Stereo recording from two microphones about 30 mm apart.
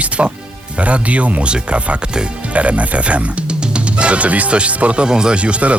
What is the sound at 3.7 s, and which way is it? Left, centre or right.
Music, right.